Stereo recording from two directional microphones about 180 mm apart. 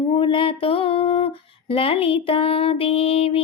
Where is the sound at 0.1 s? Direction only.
25° left (ahead or behind).